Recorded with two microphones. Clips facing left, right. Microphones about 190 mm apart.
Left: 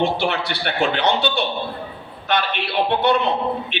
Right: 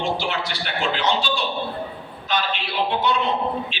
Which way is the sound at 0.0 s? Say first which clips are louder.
Left 4 dB; 60° left (ahead or behind).